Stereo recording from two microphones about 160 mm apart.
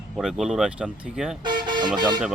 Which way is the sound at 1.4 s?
30° right (ahead or behind).